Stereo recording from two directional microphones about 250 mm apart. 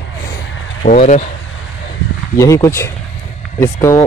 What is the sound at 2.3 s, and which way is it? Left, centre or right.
Speech, centre.